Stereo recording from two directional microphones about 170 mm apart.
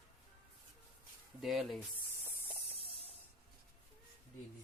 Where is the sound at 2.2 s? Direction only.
35° left (ahead or behind).